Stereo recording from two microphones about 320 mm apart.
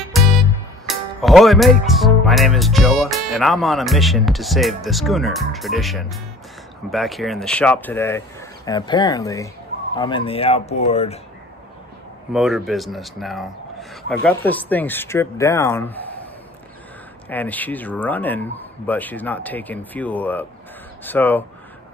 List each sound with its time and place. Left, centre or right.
0.8 s speech: centre
12.3 s speech: centre
17.3 s speech: centre